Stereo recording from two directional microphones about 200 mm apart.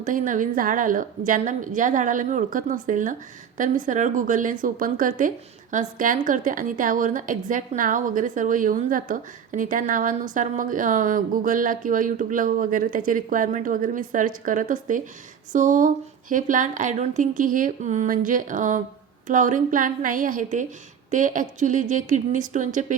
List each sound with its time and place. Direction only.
0.0 s speech: 40° right (ahead or behind)